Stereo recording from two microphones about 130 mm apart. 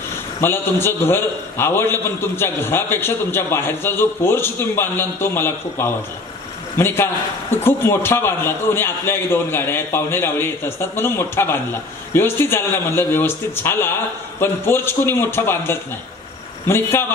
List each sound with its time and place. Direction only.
0.4 s a man's voice: 20° left (ahead or behind)